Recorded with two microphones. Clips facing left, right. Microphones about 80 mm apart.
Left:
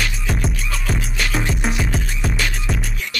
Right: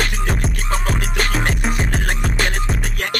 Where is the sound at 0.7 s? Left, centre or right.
Right.